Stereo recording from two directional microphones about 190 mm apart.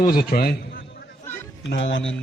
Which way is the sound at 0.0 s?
50° left (ahead or behind).